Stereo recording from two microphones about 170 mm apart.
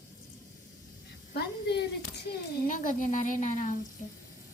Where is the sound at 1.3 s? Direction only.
75° left (ahead or behind).